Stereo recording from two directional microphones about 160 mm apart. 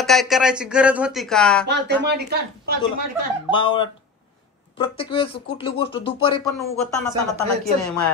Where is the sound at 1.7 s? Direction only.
90° right.